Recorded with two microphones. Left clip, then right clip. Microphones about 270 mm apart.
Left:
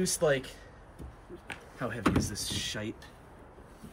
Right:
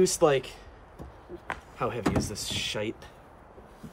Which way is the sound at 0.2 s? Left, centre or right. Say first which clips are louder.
Even; right.